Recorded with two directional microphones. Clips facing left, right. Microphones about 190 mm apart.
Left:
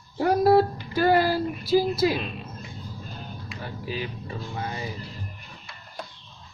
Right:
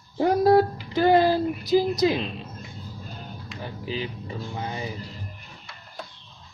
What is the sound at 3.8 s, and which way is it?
Speech, 20° right (ahead or behind).